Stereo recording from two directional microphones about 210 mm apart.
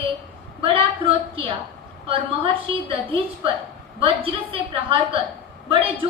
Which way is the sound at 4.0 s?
25° right (ahead or behind).